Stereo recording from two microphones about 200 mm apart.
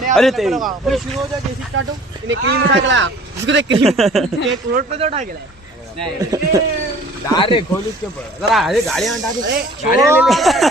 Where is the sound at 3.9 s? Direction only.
Centre (ahead or behind).